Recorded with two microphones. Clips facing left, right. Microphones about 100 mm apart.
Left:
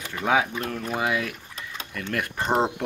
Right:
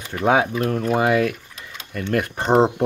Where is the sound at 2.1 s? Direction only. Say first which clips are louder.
Right 7 dB; 25° right (ahead or behind).